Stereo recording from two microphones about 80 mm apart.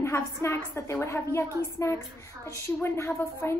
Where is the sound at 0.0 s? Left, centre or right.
Left.